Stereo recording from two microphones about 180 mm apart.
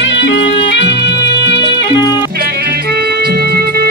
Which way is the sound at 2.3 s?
60° right (ahead or behind).